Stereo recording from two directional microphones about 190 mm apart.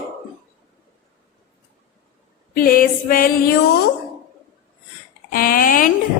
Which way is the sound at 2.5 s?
50° left (ahead or behind).